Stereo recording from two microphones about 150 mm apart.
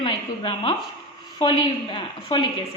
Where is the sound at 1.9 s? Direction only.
35° left (ahead or behind).